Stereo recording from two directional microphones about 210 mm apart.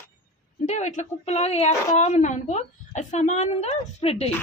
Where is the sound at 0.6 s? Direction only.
35° left (ahead or behind).